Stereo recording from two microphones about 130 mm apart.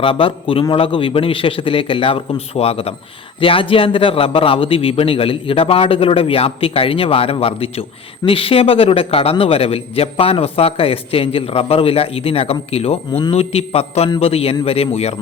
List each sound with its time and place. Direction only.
0.0 s a man's voice: 45° left (ahead or behind)